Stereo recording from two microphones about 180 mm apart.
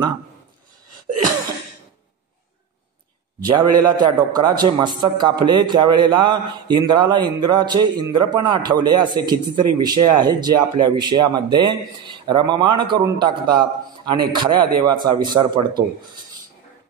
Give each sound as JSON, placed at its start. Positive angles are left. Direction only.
{"t": 3.4, "sound": "a man's voice", "side_deg": -25}